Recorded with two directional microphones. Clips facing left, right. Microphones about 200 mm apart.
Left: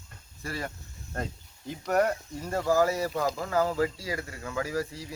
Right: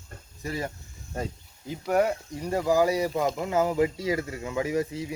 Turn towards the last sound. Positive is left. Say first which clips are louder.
# right 4 dB
turn(degrees=-20)  # may be behind; listen again after turning